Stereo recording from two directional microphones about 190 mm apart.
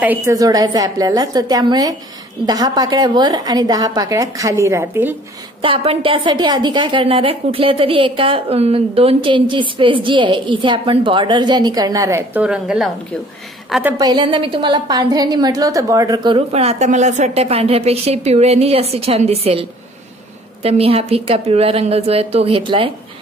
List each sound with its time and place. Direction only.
0.0 s a woman's voice: 10° right (ahead or behind)
5.6 s a woman's voice: 30° right (ahead or behind); by 13.9 s centre (ahead or behind)
13.9 s a woman's voice: 25° right (ahead or behind)
20.6 s a woman's voice: 30° right (ahead or behind)